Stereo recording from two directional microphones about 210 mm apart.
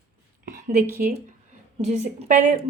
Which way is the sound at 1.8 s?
35° right (ahead or behind).